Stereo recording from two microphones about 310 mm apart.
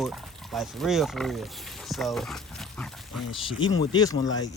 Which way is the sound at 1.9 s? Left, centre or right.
Centre.